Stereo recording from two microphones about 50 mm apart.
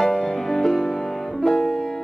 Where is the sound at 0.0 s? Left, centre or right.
Centre.